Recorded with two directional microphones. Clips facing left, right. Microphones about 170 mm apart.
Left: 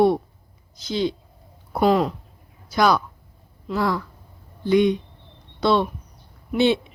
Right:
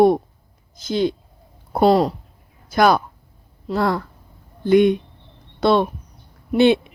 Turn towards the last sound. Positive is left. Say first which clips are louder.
# right 4 dB
turn(degrees=-55)  # may be behind; listen again after turning